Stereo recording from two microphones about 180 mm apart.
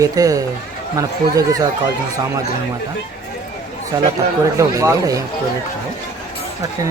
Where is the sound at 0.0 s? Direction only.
20° right (ahead or behind).